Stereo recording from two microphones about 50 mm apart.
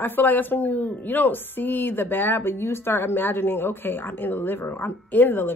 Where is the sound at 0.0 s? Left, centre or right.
Left.